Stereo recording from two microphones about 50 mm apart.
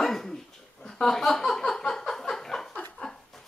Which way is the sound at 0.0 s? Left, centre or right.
Centre.